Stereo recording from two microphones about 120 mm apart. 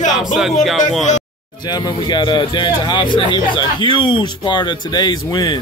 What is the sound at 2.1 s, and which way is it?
Speech, 40° left (ahead or behind).